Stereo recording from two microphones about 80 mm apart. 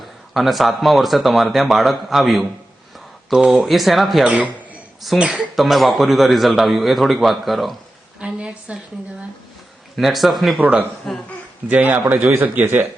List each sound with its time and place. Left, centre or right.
0.0 s speech: centre
4.3 s a man's voice: centre
5.0 s speech: centre
8.2 s a woman's voice: centre
9.9 s speech: centre
10.6 s speech: centre
11.1 s speech: centre
11.7 s speech: centre